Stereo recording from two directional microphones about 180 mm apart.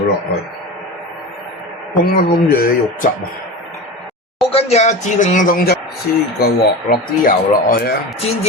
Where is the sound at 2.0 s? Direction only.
55° left (ahead or behind).